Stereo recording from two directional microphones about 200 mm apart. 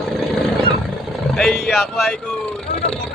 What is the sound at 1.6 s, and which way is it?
Speech, 5° right (ahead or behind).